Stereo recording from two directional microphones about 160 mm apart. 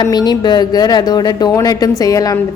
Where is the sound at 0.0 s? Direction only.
25° left (ahead or behind).